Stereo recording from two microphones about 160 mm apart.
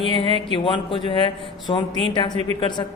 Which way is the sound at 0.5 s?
30° left (ahead or behind).